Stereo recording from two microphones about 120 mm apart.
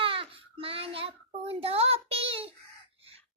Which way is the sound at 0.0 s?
50° right (ahead or behind).